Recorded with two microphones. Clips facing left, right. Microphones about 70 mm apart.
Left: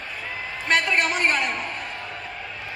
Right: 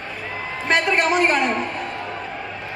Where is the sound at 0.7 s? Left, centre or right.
Centre.